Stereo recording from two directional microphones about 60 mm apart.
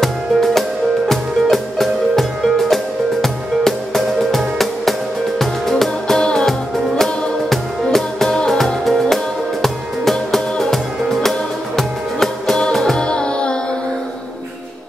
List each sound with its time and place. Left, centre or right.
0.0 s music: centre